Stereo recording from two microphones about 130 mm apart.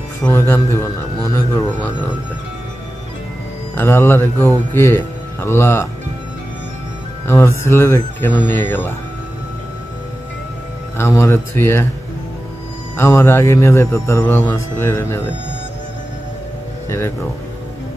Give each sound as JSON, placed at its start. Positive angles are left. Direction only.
{"t": 0.2, "sound": "a man's voice", "side_deg": 20}
{"t": 3.7, "sound": "speech", "side_deg": 20}
{"t": 7.2, "sound": "speech", "side_deg": 20}
{"t": 11.0, "sound": "a man's voice", "side_deg": 20}
{"t": 12.9, "sound": "a man's voice", "side_deg": 20}